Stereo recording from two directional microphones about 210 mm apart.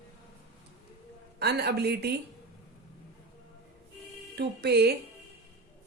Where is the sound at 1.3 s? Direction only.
50° right (ahead or behind).